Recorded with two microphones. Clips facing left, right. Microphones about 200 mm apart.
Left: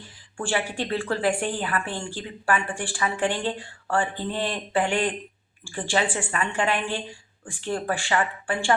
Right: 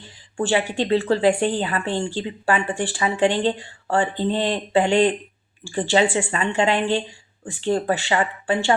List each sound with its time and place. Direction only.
0.3 s a woman's voice: 20° right (ahead or behind)